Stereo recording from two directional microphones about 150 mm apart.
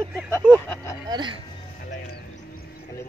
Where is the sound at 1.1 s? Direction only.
30° right (ahead or behind).